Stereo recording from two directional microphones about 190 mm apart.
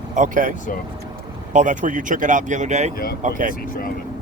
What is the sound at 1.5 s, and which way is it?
Speech, 40° right (ahead or behind).